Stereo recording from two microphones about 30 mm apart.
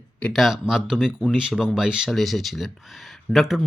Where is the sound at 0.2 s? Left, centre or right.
Left.